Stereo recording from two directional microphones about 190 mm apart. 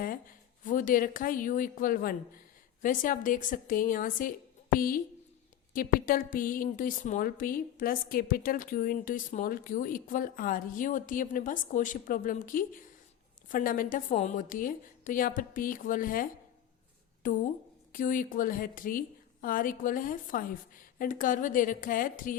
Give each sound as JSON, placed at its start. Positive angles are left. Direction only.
{"t": 0.6, "sound": "a woman's voice", "side_deg": 45}